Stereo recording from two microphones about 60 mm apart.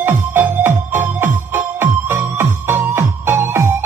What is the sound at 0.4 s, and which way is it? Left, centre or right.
Music, right.